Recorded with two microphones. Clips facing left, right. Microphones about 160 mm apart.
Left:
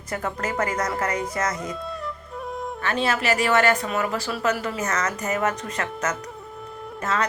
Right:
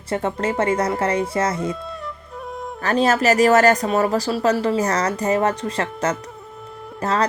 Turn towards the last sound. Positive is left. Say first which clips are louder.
# right 4 dB
turn(degrees=-35)  # may be behind; listen again after turning